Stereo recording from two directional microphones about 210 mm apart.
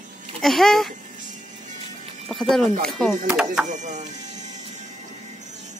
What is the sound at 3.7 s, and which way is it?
Speech, 35° right (ahead or behind).